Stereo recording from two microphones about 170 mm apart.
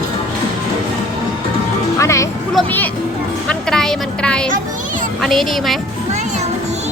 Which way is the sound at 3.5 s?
5° left (ahead or behind).